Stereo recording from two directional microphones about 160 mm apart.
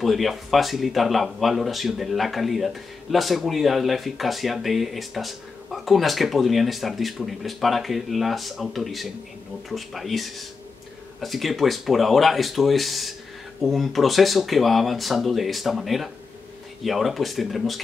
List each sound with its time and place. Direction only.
0.0 s speech: centre (ahead or behind)